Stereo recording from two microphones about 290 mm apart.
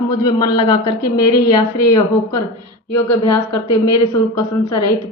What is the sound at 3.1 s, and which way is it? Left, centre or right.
Speech, left.